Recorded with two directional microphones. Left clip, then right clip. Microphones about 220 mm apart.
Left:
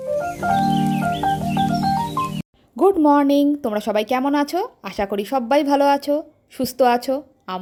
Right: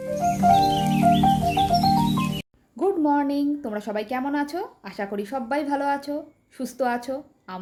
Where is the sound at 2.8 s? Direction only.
40° left (ahead or behind).